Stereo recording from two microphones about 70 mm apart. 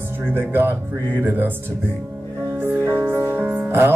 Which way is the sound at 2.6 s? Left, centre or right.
Right.